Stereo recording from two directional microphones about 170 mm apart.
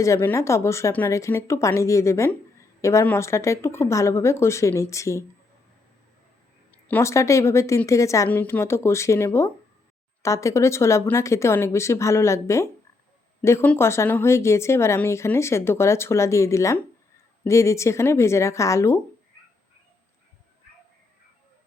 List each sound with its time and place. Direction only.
0.0 s speech: 15° left (ahead or behind)
6.7 s speech: 10° left (ahead or behind)